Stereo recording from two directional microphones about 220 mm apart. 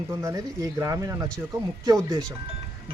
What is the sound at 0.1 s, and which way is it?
A man's voice, 15° right (ahead or behind).